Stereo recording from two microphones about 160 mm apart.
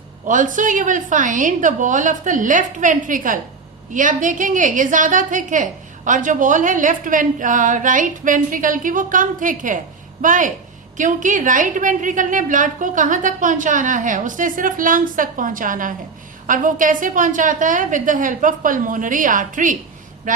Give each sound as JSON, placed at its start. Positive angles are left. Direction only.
{"t": 0.3, "sound": "a woman's voice", "side_deg": -55}